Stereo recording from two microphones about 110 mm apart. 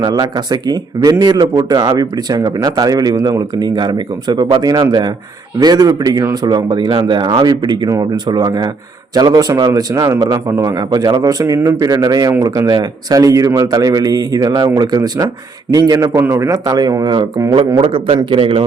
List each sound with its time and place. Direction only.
0.0 s speech: 35° right (ahead or behind)
9.9 s a man's voice: 30° right (ahead or behind)
10.2 s speech: 40° right (ahead or behind)
10.4 s a man's voice: 30° right (ahead or behind); by 18.6 s 50° right (ahead or behind)